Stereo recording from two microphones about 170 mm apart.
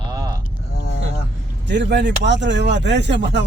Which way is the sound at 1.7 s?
90° right.